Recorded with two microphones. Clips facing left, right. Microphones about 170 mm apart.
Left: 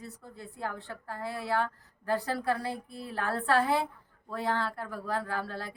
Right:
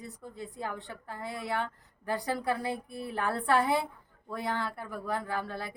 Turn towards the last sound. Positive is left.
turn(degrees=-15)  # may be behind; listen again after turning